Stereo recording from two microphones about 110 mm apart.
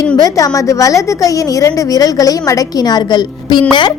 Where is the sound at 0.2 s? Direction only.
35° left (ahead or behind).